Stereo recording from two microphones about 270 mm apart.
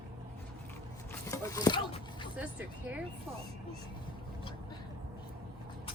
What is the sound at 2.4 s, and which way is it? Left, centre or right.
Speech, centre.